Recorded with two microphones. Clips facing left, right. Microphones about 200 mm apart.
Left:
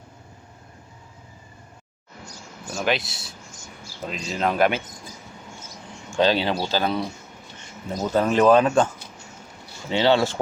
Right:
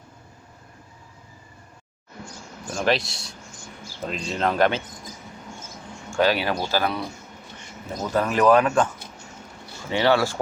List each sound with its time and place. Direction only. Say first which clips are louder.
2.7 s speech: right 2 dB; centre (ahead or behind)
6.1 s speech: left 1 dB; 25° left (ahead or behind)
8.1 s speech: left 1 dB; 25° left (ahead or behind)
9.9 s speech: left 1 dB; 20° left (ahead or behind)